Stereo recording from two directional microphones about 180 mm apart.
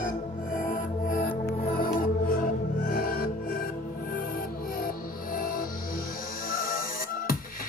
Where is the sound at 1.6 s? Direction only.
50° left (ahead or behind).